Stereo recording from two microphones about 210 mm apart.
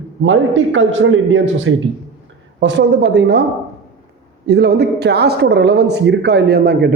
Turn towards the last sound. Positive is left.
turn(degrees=-50)  # may be behind; listen again after turning